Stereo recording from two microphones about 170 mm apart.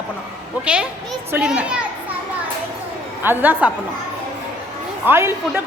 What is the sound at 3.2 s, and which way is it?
Speech, 10° right (ahead or behind).